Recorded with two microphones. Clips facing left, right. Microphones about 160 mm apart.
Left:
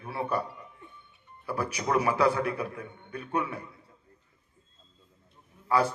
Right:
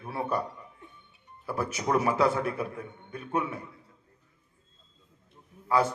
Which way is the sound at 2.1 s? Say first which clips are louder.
Left 1 dB; 20° right (ahead or behind).